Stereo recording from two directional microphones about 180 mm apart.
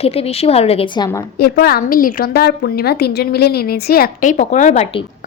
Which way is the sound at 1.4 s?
60° left (ahead or behind).